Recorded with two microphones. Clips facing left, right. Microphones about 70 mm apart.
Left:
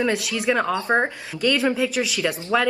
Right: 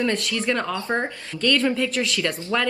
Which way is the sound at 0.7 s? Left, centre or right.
Left.